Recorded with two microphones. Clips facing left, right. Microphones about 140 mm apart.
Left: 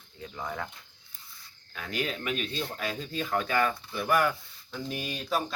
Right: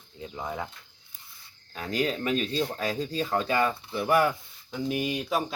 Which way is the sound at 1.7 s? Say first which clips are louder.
Right 5 dB; 35° right (ahead or behind).